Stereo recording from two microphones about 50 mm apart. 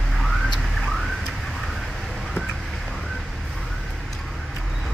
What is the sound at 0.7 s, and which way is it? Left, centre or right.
Car alarm, centre.